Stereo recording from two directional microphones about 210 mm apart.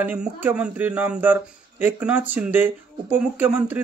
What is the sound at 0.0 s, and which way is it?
A man's voice, 5° right (ahead or behind).